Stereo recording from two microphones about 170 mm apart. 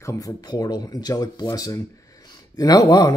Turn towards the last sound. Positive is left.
turn(degrees=25)  # may be behind; listen again after turning